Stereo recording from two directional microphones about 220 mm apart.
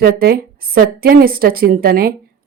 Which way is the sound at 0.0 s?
45° right (ahead or behind).